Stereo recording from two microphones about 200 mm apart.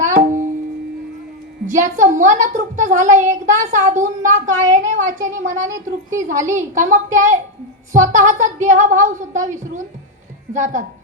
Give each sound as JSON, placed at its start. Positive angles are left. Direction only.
{"t": 0.0, "sound": "music", "side_deg": -40}
{"t": 1.6, "sound": "a woman's voice", "side_deg": -40}